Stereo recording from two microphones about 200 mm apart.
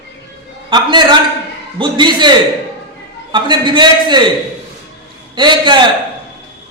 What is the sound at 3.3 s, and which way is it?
Speech, 25° right (ahead or behind).